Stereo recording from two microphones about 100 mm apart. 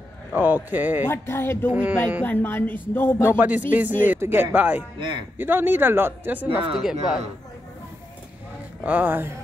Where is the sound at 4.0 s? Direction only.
20° right (ahead or behind).